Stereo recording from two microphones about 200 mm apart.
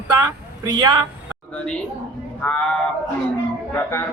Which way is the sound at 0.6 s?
20° right (ahead or behind).